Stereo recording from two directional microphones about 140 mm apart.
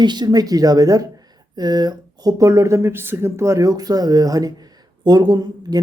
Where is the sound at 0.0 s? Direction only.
30° right (ahead or behind).